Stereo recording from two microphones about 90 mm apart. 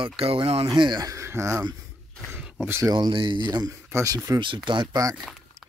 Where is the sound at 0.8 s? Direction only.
50° right (ahead or behind); by 1.7 s 30° right (ahead or behind).